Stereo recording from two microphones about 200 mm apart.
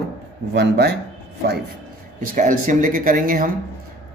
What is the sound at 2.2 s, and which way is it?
Speech, 40° right (ahead or behind).